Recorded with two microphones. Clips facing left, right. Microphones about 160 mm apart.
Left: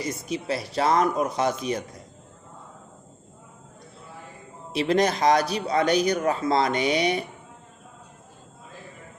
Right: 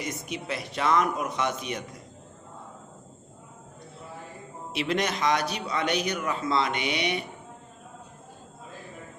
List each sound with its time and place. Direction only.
0.0 s a man's voice: 35° left (ahead or behind)
4.7 s a man's voice: 35° left (ahead or behind)